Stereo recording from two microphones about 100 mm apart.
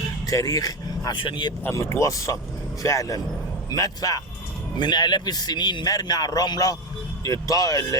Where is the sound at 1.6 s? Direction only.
25° left (ahead or behind).